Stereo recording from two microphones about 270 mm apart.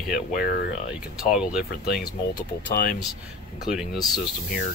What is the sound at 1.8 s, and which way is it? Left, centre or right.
Speech, left.